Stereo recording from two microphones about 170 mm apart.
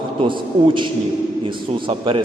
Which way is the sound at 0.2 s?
30° right (ahead or behind).